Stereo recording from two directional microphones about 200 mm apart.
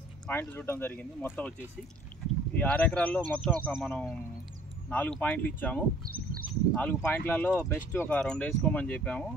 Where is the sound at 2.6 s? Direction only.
10° left (ahead or behind).